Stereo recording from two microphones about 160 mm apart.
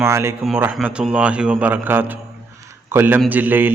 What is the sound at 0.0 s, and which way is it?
A man's voice, 15° right (ahead or behind).